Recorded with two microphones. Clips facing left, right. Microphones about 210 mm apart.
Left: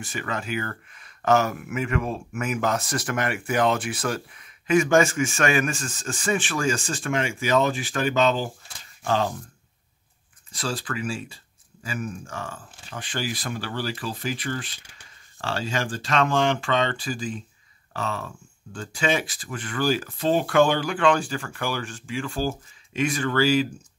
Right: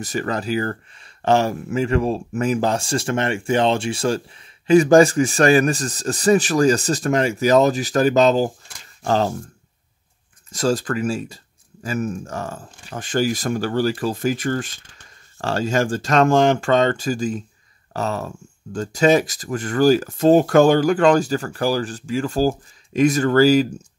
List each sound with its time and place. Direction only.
0.0 s speech: 40° right (ahead or behind)
10.5 s speech: 45° right (ahead or behind)